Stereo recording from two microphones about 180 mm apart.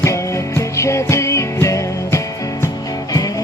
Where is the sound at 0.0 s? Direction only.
15° left (ahead or behind).